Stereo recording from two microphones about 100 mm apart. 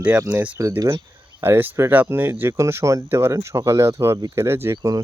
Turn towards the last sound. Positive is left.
turn(degrees=-40)  # may be behind; listen again after turning